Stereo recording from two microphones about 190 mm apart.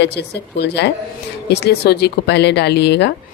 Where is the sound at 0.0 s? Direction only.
60° left (ahead or behind).